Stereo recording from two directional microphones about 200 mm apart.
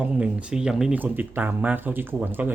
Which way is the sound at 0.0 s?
5° right (ahead or behind).